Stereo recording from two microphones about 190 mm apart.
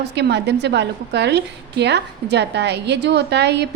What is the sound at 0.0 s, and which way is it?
A woman's voice, 65° right (ahead or behind).